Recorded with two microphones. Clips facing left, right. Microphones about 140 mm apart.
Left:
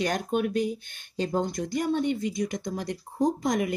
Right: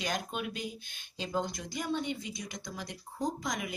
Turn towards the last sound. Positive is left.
turn(degrees=55)  # may be behind; listen again after turning